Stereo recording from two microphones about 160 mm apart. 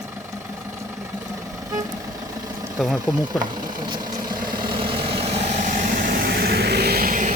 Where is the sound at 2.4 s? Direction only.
20° right (ahead or behind).